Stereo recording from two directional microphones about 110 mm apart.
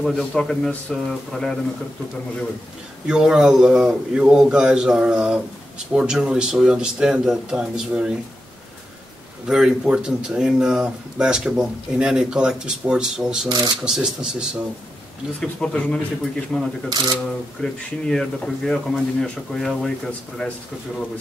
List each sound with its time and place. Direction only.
0.0 s speech: 5° left (ahead or behind)
3.1 s speech: 5° right (ahead or behind)
9.5 s speech: 5° right (ahead or behind)
13.5 s speech: 40° right (ahead or behind)
13.8 s speech: 5° right (ahead or behind)
15.4 s speech: 10° left (ahead or behind)